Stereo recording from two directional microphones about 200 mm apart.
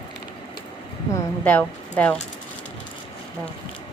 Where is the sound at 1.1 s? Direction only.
10° left (ahead or behind).